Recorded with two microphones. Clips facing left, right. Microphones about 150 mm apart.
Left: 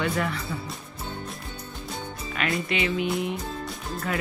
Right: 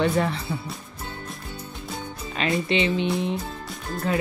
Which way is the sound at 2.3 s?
25° right (ahead or behind).